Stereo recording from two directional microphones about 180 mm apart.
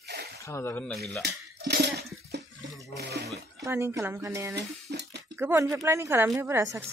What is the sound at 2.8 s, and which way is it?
Speech, 65° right (ahead or behind).